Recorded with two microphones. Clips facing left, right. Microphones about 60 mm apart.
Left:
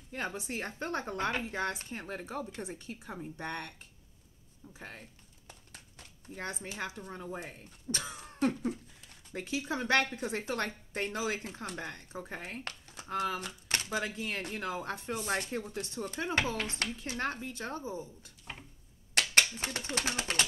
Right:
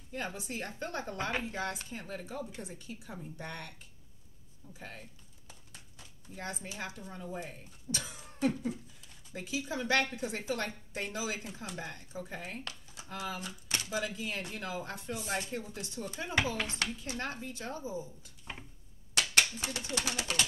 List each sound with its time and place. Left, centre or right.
0.1 s a woman's voice: left
4.7 s speech: left
5.5 s a sound: left
6.6 s speech: left
19.6 s speech: left